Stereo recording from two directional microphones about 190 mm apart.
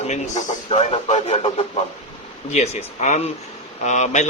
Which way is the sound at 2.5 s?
35° left (ahead or behind).